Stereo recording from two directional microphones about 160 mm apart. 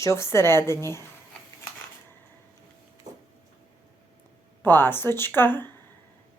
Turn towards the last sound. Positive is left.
turn(degrees=10)  # may be behind; listen again after turning